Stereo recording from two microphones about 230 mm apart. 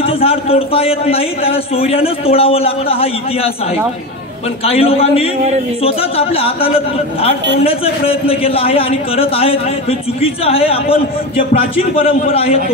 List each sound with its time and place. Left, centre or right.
0.0 s a man's voice: left
4.6 s a man's voice: left